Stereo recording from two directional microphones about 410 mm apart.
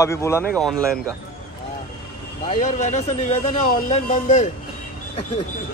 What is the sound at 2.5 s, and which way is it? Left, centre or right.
Speech, centre.